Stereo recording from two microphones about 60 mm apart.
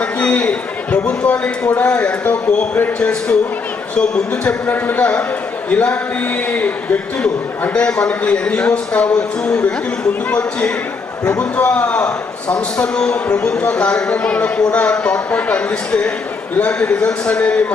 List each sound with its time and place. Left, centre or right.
0.0 s a man's voice: centre